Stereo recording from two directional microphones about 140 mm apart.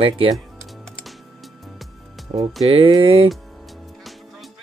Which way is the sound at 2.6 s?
45° right (ahead or behind).